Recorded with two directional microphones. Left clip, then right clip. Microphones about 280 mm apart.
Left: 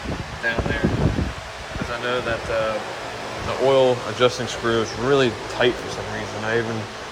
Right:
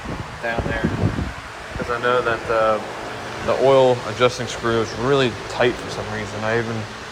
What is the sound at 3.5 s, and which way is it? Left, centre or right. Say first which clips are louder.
Speech: right 3 dB; centre.